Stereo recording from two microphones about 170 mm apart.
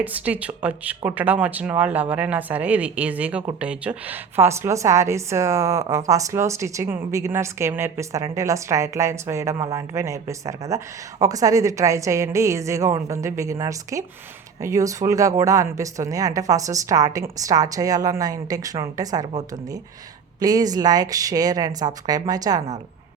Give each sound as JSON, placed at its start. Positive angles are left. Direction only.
{"t": 0.0, "sound": "a woman's voice", "side_deg": -10}
{"t": 20.4, "sound": "speech", "side_deg": -20}